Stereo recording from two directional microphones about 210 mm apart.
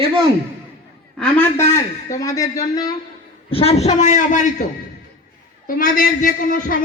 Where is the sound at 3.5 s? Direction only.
30° left (ahead or behind).